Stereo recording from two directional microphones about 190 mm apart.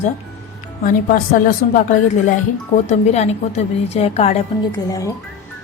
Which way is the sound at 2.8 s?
35° left (ahead or behind).